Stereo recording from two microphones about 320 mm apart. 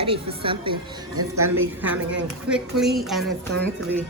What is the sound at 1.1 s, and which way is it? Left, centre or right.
Speech, right.